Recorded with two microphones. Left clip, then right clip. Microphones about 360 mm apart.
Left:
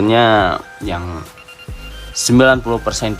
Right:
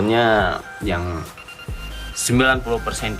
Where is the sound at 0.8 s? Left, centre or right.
Centre.